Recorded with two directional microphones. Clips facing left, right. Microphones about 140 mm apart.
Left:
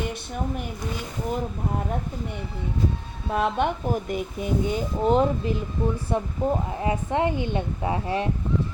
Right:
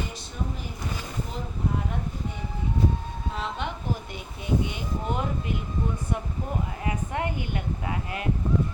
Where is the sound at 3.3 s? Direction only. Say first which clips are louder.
Left 10 dB; 55° left (ahead or behind).